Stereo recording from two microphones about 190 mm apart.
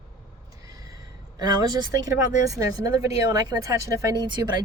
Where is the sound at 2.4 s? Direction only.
20° right (ahead or behind).